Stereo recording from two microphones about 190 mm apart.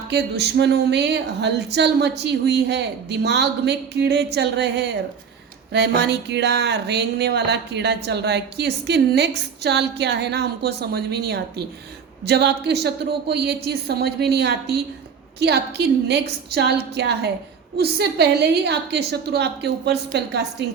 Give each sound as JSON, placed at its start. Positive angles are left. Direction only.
{"t": 0.1, "sound": "speech", "side_deg": -60}